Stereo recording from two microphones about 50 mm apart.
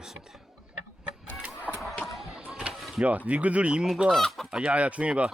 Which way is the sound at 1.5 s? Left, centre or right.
Right.